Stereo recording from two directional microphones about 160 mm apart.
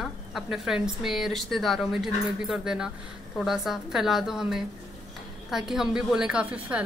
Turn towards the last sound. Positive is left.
turn(degrees=-10)  # may be behind; listen again after turning